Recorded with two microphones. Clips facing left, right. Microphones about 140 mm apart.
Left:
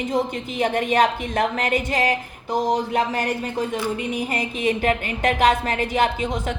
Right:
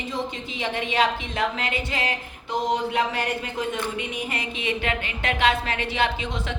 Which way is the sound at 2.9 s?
40° left (ahead or behind).